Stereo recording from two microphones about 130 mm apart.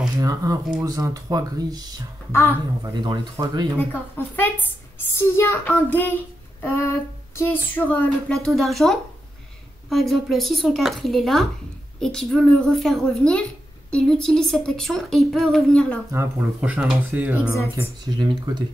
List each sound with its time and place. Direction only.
0.2 s speech: 25° right (ahead or behind)
3.7 s child singing: 15° left (ahead or behind)
9.8 s a woman's voice: centre (ahead or behind)
16.1 s speech: 15° right (ahead or behind)
18.0 s speech: 35° right (ahead or behind)